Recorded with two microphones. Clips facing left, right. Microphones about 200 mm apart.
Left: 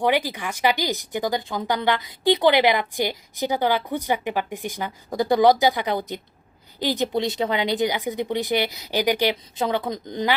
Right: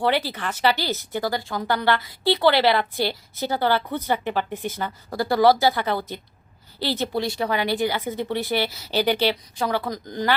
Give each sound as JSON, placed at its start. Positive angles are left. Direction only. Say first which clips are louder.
{"t": 0.0, "sound": "speech", "louder": "left 1 dB", "side_deg": 15}